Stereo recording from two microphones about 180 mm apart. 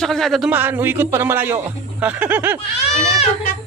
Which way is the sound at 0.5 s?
10° right (ahead or behind).